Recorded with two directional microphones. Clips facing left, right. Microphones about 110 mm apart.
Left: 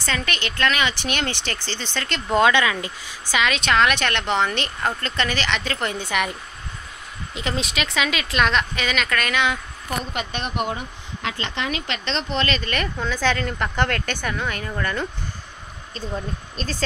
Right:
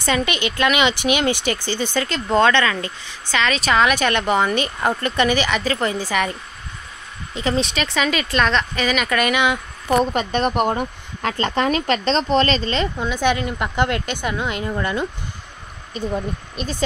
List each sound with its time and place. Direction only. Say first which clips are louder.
0.0 s speech: right 6 dB; 15° right (ahead or behind)
2.3 s speech: right 2 dB; 10° left (ahead or behind)
3.5 s speech: right 3 dB; 5° right (ahead or behind)
7.3 s speech: right 5 dB; centre (ahead or behind)
9.8 s speech: right 10 dB; 40° right (ahead or behind); by 16.7 s 15° right (ahead or behind)